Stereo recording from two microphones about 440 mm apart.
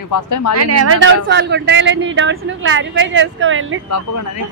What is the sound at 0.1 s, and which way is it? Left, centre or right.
Speech, left.